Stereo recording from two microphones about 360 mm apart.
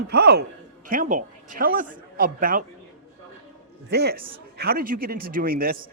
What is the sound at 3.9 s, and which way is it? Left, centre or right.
A man's voice, right.